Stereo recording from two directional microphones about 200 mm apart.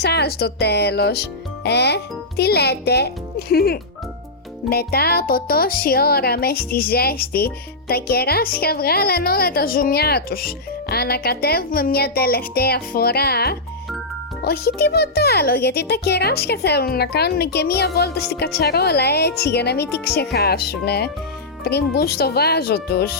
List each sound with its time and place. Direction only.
0.0 s a child's voice: 55° left (ahead or behind)